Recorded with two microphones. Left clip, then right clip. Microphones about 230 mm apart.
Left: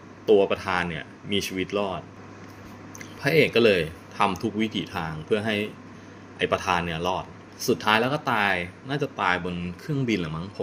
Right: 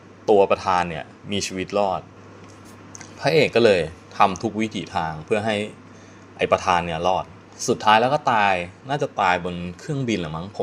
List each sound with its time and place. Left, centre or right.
0.3 s speech: centre
3.0 s speech: centre